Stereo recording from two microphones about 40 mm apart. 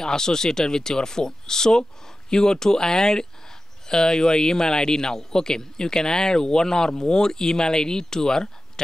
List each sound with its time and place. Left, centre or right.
0.0 s a man's voice: centre